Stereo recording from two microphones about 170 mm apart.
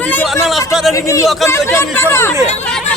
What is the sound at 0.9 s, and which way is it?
Speech, 20° left (ahead or behind).